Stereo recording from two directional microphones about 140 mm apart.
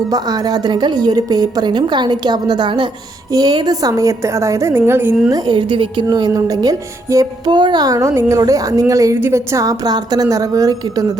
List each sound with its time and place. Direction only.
0.1 s a woman's voice: 30° right (ahead or behind)
5.3 s a woman's voice: 35° right (ahead or behind)